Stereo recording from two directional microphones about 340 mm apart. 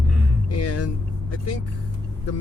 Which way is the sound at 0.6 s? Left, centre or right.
Left.